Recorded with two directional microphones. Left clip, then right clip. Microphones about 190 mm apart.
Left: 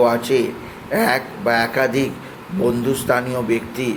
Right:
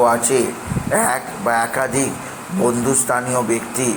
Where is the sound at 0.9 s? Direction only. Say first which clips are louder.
Left 1 dB; 20° left (ahead or behind).